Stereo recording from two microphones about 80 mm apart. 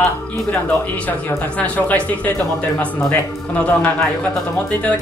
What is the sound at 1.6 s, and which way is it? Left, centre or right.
A man's voice, centre.